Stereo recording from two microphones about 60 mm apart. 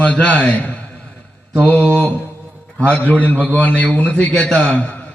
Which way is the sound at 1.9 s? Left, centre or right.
Left.